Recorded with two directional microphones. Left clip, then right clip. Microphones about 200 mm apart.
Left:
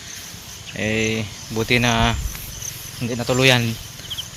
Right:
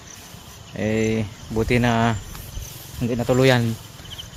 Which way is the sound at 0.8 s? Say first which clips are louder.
Left 1 dB; 20° right (ahead or behind).